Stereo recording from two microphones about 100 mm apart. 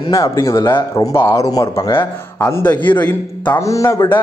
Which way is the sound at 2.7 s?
15° left (ahead or behind).